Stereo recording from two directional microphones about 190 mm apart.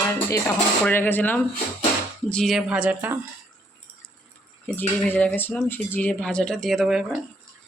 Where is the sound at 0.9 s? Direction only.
10° left (ahead or behind); by 3.2 s 10° right (ahead or behind).